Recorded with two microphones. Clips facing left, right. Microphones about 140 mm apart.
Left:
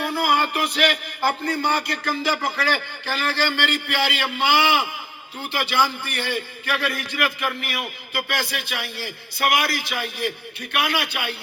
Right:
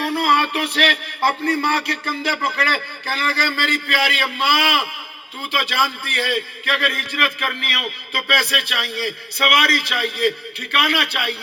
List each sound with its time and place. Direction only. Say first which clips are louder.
0.0 s a sound: right 3 dB; 60° right (ahead or behind)
3.1 s speech: right 1 dB; 45° right (ahead or behind)
5.5 s a man's voice: even; 75° right (ahead or behind)